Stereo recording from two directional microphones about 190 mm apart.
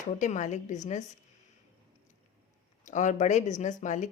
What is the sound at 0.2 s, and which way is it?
Speech, 40° left (ahead or behind).